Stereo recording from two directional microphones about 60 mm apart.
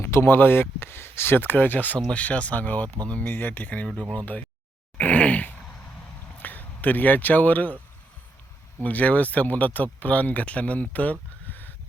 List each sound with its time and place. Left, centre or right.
0.0 s speech: left
4.9 s groan: left
6.3 s speech: left
8.8 s speech: left